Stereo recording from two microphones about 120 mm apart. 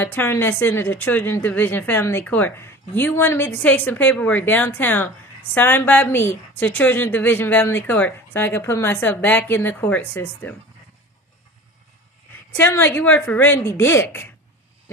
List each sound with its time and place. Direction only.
0.0 s speech: 20° left (ahead or behind)
12.5 s a woman's voice: 20° left (ahead or behind)